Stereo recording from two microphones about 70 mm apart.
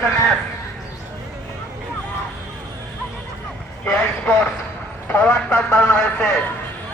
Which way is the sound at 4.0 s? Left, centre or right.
Left.